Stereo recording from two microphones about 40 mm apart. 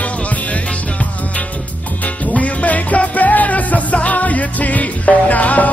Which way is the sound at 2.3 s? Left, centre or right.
Left.